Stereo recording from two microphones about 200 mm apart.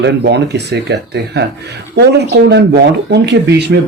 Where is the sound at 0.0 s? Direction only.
55° right (ahead or behind).